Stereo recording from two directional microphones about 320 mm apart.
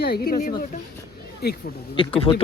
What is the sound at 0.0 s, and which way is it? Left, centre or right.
Speech, left.